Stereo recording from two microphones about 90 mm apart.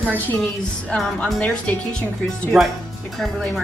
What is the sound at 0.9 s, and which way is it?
A woman's voice, 10° left (ahead or behind).